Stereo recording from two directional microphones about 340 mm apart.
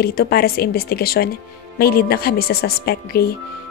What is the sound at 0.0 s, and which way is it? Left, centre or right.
Speech, left.